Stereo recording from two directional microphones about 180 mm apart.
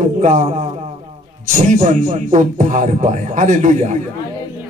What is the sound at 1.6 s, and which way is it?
Music, 45° right (ahead or behind).